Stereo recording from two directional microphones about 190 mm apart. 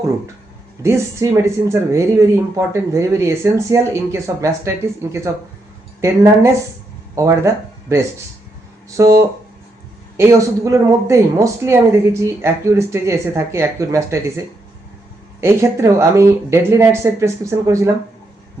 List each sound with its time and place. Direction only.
0.8 s speech: 15° right (ahead or behind)